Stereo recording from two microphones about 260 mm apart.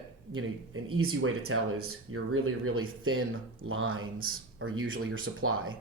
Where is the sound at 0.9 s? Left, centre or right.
Right.